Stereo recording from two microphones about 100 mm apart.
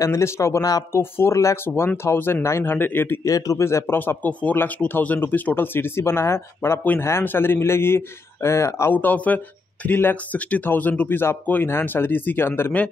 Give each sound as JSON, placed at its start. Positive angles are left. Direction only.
{"t": 0.0, "sound": "speech", "side_deg": 30}
{"t": 0.9, "sound": "speech", "side_deg": 25}
{"t": 3.3, "sound": "speech", "side_deg": 35}